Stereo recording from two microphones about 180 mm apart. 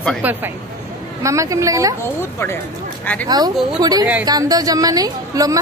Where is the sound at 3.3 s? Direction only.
20° right (ahead or behind).